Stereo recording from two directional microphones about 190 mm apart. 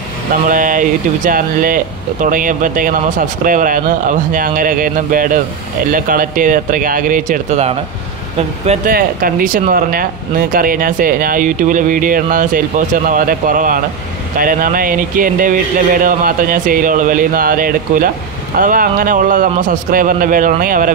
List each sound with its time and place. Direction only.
0.5 s speech: 45° right (ahead or behind)
8.9 s speech: 45° right (ahead or behind)